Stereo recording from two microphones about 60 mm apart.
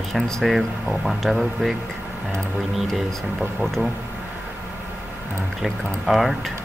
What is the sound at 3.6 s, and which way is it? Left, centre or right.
Speech, centre.